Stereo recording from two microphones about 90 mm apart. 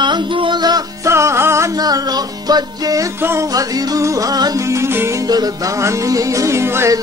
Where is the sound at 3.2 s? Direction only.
25° right (ahead or behind).